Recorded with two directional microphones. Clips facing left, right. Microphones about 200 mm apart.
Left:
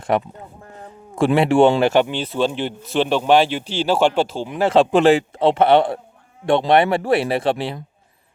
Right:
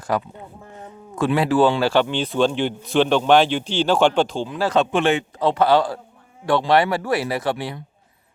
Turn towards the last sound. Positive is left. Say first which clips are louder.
# left 4 dB
turn(degrees=25)  # may be behind; listen again after turning